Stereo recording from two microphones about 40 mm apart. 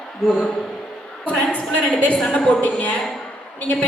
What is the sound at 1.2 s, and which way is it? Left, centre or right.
Speech, left.